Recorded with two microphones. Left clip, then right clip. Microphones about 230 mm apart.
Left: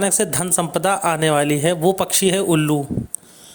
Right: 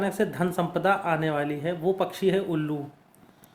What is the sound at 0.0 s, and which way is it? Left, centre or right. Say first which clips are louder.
Speech: left 6 dB; left.